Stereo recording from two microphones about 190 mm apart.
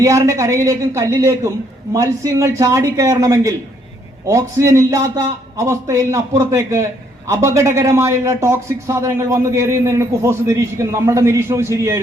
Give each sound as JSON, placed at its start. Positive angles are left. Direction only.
{"t": 0.0, "sound": "a man's voice", "side_deg": -15}